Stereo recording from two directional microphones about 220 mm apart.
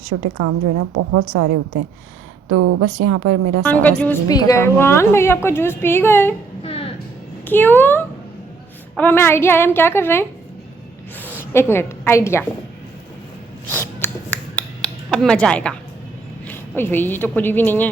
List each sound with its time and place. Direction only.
0.3 s a woman's voice: 90° right
3.6 s a woman's voice: 5° left (ahead or behind)
6.6 s a sound: 25° left (ahead or behind)
7.4 s a woman's voice: 10° left (ahead or behind)
13.7 s a sound: 10° left (ahead or behind)
16.5 s a woman's voice: 10° left (ahead or behind)